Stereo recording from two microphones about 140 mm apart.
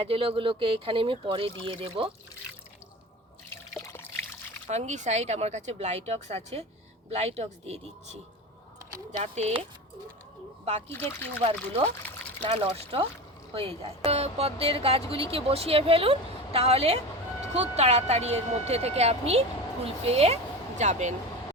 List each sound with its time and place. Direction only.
0.0 s speech: 40° right (ahead or behind)
3.9 s trickle: 15° left (ahead or behind)
4.7 s a woman's voice: 55° right (ahead or behind)
9.2 s a woman's voice: 50° right (ahead or behind)
10.8 s speech: 15° left (ahead or behind)
11.4 s a woman's voice: 45° right (ahead or behind)
12.0 s pour: 10° left (ahead or behind)
12.5 s a woman's voice: 40° right (ahead or behind); by 21.2 s 55° right (ahead or behind)